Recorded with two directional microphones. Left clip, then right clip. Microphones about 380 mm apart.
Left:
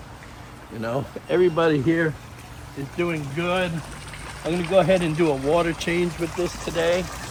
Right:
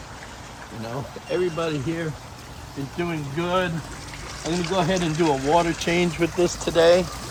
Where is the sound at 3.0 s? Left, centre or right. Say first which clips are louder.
Left 2 dB; centre.